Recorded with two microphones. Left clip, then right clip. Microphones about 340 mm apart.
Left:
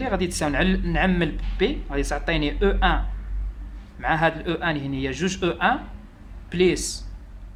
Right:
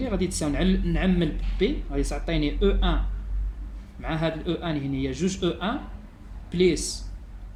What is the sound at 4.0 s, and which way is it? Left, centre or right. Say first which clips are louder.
Speech: left 7 dB; left.